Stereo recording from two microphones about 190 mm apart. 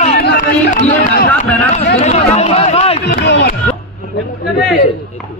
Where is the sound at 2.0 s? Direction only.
35° left (ahead or behind).